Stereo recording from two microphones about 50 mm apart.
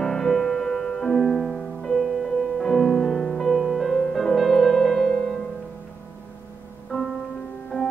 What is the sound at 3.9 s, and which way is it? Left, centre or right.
Music, centre.